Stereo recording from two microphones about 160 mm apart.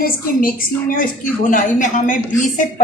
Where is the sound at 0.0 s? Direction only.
60° left (ahead or behind).